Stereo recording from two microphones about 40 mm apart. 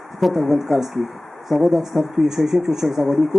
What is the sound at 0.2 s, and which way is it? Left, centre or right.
Speech, centre.